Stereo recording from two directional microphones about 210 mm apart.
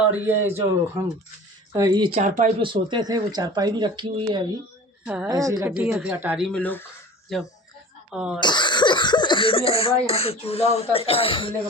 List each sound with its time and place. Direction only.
0.0 s speech: 10° right (ahead or behind)
2.2 s speech: 35° right (ahead or behind)
2.6 s speech: 25° right (ahead or behind)
5.0 s a woman's voice: 5° right (ahead or behind)
5.3 s a woman's voice: 15° right (ahead or behind)
8.4 s speech: 20° left (ahead or behind)